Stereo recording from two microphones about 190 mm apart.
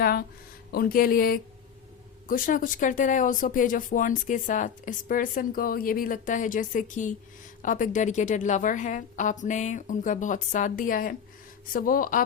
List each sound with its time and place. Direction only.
0.0 s a woman's voice: 55° left (ahead or behind)